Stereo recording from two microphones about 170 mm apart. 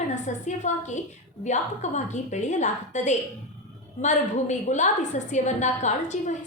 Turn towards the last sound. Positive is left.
turn(degrees=45)  # may be behind; listen again after turning